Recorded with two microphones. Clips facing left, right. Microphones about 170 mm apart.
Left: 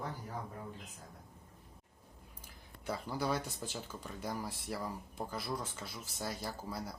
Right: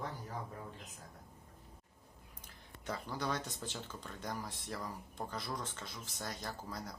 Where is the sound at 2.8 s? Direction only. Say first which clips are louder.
Left 3 dB; 10° left (ahead or behind).